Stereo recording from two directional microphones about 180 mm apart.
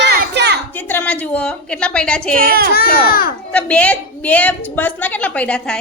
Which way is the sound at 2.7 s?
60° left (ahead or behind).